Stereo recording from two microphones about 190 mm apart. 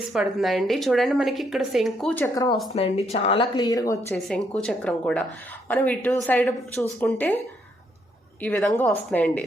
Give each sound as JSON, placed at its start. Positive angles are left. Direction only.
{"t": 0.1, "sound": "a woman's voice", "side_deg": 0}
{"t": 2.2, "sound": "speech", "side_deg": 20}
{"t": 2.7, "sound": "speech", "side_deg": 30}
{"t": 4.1, "sound": "a woman's voice", "side_deg": 0}